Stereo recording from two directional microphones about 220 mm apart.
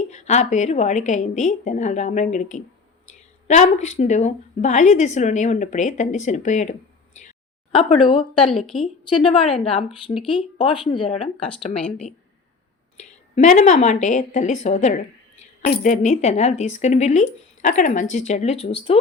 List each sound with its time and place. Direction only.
0.0 s a woman's voice: 30° left (ahead or behind)
8.4 s a woman's voice: centre (ahead or behind)
8.8 s speech: 25° left (ahead or behind)
13.0 s a woman's voice: 30° left (ahead or behind)